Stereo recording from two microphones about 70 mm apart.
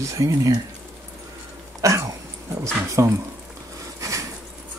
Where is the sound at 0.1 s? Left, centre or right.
Right.